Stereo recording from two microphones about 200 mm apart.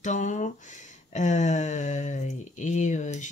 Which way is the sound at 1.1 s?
35° left (ahead or behind).